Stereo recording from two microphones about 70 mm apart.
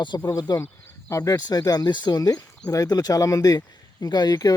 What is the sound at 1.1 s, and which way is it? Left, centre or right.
Speech, left.